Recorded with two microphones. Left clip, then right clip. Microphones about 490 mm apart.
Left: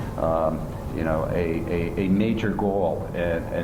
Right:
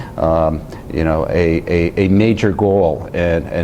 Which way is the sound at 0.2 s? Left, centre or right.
Right.